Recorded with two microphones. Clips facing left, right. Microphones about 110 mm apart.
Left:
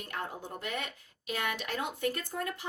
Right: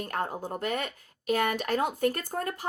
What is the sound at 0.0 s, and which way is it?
A woman's voice, 45° right (ahead or behind).